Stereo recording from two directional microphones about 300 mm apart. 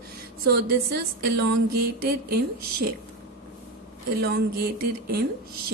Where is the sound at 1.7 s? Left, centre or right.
Right.